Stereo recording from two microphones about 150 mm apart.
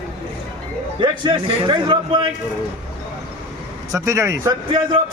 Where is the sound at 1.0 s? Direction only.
30° right (ahead or behind).